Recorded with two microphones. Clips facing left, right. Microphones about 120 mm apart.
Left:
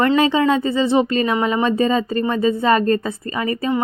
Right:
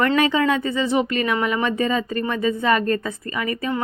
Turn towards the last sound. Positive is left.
turn(degrees=30)  # may be behind; listen again after turning